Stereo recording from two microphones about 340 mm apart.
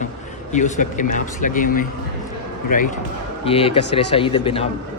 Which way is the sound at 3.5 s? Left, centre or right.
Centre.